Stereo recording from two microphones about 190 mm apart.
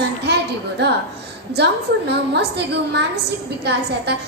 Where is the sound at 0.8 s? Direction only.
65° right (ahead or behind).